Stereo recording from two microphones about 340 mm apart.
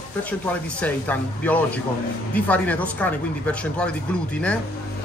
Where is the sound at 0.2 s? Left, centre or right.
Centre.